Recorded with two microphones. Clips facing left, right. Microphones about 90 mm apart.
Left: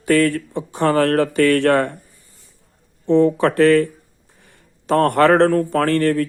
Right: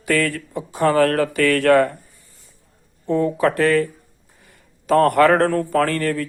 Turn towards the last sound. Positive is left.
turn(degrees=40)  # may be behind; listen again after turning